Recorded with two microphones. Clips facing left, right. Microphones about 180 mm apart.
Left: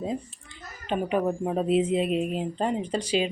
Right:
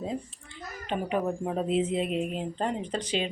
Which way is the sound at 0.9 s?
15° left (ahead or behind).